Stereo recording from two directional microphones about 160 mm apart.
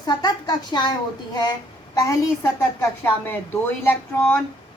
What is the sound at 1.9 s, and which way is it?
A woman's voice, 20° left (ahead or behind).